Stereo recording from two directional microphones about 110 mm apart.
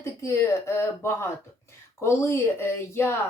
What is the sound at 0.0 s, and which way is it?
Speech, 25° left (ahead or behind).